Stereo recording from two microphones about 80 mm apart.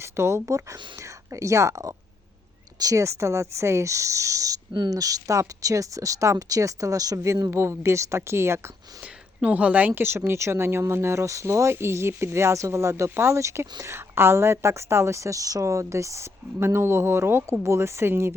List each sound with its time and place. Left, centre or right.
0.0 s speech: right
7.5 s speech: right
9.4 s speech: centre